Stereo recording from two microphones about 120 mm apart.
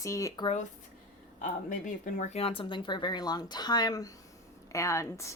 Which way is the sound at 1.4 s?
90° left.